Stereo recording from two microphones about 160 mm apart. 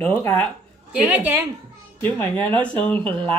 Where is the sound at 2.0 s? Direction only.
10° left (ahead or behind).